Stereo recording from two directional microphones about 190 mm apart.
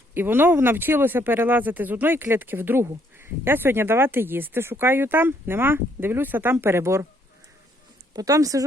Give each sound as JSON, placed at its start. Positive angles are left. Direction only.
{"t": 0.1, "sound": "speech", "side_deg": -10}
{"t": 8.1, "sound": "speech", "side_deg": -20}